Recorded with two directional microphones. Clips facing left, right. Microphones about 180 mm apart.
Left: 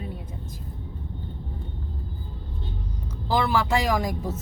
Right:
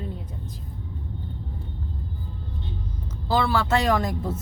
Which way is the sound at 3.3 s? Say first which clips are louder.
Right 1 dB; 15° left (ahead or behind).